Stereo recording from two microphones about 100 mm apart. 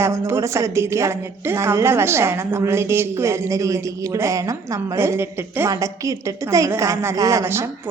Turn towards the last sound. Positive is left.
turn(degrees=-25)  # may be behind; listen again after turning